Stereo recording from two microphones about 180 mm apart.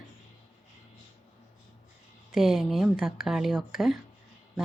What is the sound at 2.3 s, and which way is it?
Speech, centre (ahead or behind).